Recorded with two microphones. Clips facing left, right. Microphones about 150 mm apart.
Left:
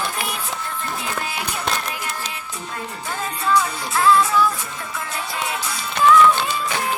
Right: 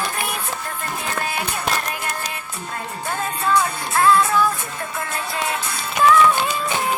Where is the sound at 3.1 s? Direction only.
55° right (ahead or behind).